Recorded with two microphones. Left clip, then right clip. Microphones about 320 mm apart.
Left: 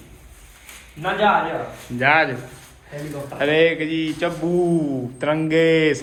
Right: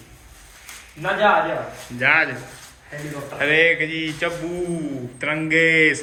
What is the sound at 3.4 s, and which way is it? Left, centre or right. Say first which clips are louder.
A man's voice: right 1 dB; centre.